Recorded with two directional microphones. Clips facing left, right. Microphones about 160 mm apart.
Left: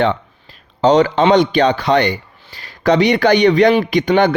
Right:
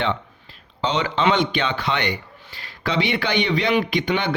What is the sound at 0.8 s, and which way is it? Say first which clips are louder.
A man's voice: left 10 dB; 40° left (ahead or behind).